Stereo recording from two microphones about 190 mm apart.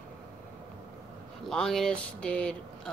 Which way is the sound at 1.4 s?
5° left (ahead or behind).